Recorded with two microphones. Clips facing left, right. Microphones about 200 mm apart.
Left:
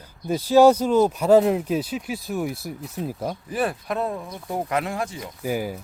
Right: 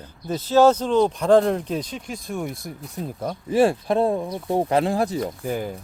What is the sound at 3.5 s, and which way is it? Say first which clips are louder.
Speech: right 9 dB; 30° right (ahead or behind).